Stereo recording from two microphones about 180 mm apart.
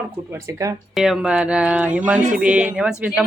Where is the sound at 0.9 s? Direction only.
5° right (ahead or behind).